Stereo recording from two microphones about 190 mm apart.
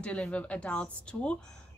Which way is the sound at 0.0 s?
5° left (ahead or behind).